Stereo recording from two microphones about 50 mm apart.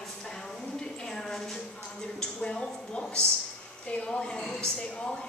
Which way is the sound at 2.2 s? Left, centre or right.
Centre.